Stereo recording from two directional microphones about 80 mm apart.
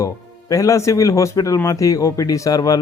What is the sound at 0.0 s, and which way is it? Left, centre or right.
Speech, left.